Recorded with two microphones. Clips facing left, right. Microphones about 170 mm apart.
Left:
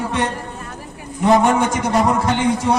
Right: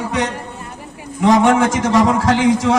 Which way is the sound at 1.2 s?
90° right.